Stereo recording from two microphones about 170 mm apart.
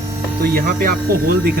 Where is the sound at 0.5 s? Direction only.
60° right (ahead or behind).